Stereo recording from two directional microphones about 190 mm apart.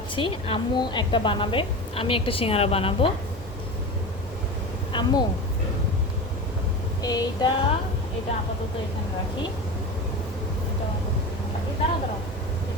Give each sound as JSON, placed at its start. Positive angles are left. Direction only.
{"t": 0.2, "sound": "a woman's voice", "side_deg": 25}
{"t": 4.9, "sound": "speech", "side_deg": 25}
{"t": 7.0, "sound": "a woman's voice", "side_deg": 20}